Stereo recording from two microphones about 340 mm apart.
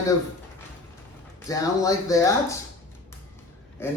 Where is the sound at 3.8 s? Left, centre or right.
Centre.